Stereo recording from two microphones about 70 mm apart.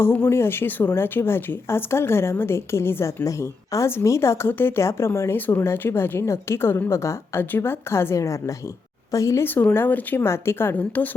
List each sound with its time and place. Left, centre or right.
0.0 s speech: left
3.2 s a woman's voice: left
4.4 s a woman's voice: left
9.4 s speech: left
10.8 s speech: left